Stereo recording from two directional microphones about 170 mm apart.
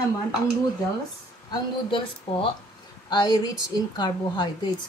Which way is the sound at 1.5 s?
30° left (ahead or behind).